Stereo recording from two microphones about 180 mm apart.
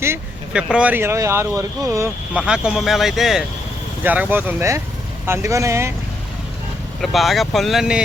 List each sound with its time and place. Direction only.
0.0 s speech: 10° right (ahead or behind)
2.3 s speech: 5° right (ahead or behind)
7.0 s speech: centre (ahead or behind)